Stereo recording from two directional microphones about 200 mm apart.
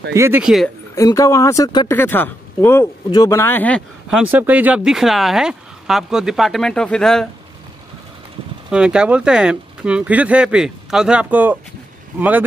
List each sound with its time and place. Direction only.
0.1 s speech: 10° right (ahead or behind)
0.9 s speech: 15° left (ahead or behind)
2.0 s speech: 10° left (ahead or behind)
4.1 s speech: 5° right (ahead or behind)
8.6 s speech: 5° right (ahead or behind)